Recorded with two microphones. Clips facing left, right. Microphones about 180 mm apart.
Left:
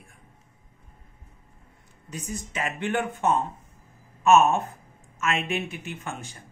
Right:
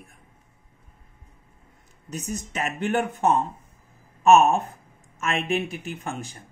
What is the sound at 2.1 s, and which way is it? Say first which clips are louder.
Speech: right 3 dB; 40° right (ahead or behind).